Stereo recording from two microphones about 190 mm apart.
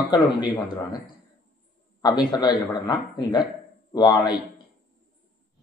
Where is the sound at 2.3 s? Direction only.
20° left (ahead or behind).